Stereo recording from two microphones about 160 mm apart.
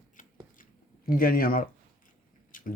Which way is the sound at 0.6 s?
65° left (ahead or behind).